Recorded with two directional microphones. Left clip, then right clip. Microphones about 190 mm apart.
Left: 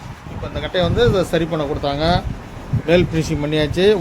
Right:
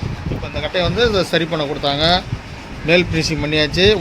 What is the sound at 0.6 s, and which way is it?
Speech, 20° left (ahead or behind).